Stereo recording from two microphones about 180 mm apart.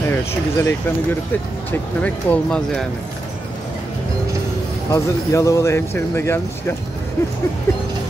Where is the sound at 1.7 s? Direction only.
10° left (ahead or behind).